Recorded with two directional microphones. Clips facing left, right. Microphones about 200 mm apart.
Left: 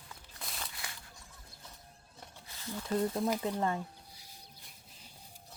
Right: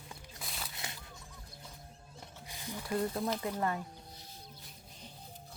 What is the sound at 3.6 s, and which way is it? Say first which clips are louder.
Speech: left 1 dB; 25° left (ahead or behind).